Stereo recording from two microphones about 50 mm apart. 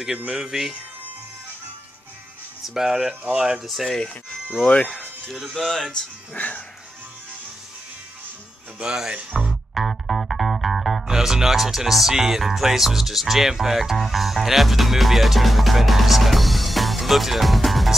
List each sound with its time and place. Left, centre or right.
0.3 s speech: centre
2.6 s speech: centre
3.6 s speech: centre
4.1 s speech: left
5.3 s speech: centre
6.3 s speech: left
8.8 s speech: centre
9.5 s music: centre
11.1 s speech: centre